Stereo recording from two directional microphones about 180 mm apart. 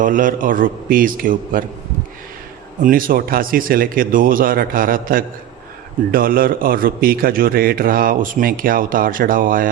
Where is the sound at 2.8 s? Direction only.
50° right (ahead or behind).